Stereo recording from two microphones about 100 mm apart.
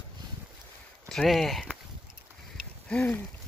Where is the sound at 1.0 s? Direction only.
5° left (ahead or behind).